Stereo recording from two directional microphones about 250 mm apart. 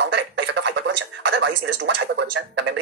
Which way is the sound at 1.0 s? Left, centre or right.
Right.